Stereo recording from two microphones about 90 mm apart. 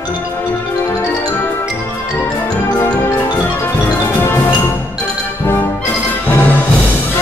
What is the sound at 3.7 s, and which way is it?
Music, 30° left (ahead or behind).